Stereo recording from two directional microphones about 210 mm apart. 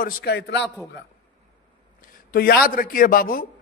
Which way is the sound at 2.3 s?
45° left (ahead or behind).